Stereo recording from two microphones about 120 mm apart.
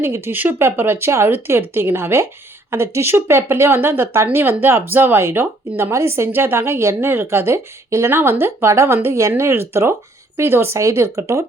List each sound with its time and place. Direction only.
0.0 s a woman's voice: 20° right (ahead or behind)